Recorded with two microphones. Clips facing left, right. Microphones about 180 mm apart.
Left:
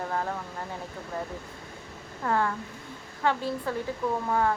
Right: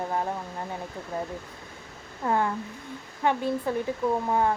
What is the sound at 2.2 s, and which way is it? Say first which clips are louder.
Speech: right 1 dB; 20° right (ahead or behind).